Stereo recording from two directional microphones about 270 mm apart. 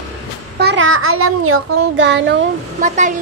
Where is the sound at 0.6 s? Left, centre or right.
Right.